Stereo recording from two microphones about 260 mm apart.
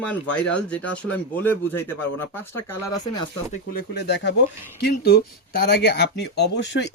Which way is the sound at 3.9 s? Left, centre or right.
Left.